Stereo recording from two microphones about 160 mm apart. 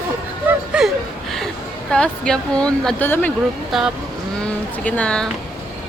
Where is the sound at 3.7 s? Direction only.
5° right (ahead or behind).